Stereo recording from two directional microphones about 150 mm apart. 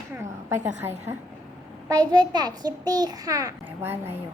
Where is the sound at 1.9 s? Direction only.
25° right (ahead or behind).